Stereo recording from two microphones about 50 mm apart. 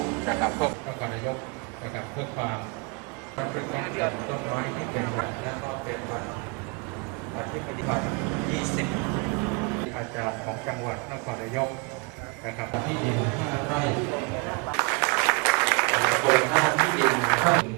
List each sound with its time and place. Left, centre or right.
0.3 s a sound: right
3.3 s speech: right
7.9 s speech: centre
8.5 s speech: centre
9.1 s vehicle: centre
9.6 s a man's voice: centre